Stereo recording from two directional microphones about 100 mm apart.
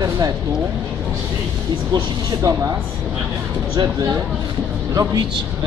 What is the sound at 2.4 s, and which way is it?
Speech, 35° right (ahead or behind).